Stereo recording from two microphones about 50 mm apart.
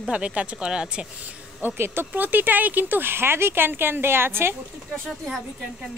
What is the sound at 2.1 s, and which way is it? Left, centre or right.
Speech, right.